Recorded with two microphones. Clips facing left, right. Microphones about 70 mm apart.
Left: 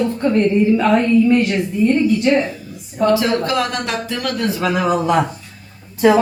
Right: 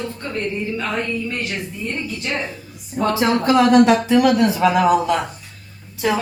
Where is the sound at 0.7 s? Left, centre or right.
Centre.